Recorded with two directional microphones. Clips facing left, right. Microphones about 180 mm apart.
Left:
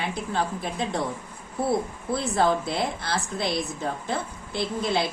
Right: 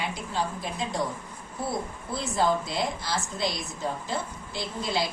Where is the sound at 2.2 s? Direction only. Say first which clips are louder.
Left 2 dB; 60° left (ahead or behind).